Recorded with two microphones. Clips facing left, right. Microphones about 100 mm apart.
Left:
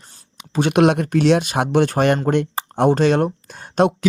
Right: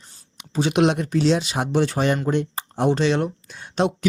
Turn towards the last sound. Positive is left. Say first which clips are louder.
# left 5 dB
turn(degrees=50)  # may be behind; listen again after turning